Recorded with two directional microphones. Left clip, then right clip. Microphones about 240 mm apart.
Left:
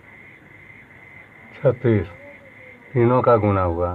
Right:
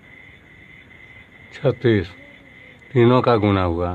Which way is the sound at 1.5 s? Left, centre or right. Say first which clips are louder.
Even; right.